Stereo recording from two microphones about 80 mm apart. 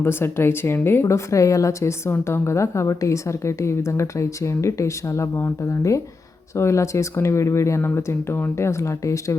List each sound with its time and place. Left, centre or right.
0.0 s speech: left